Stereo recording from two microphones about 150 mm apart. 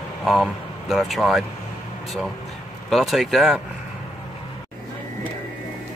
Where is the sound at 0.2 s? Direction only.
Centre (ahead or behind).